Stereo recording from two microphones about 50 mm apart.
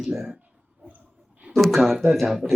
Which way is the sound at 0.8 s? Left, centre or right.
Right.